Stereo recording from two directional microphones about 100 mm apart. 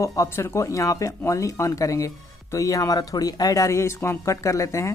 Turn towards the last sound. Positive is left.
turn(degrees=30)  # may be behind; listen again after turning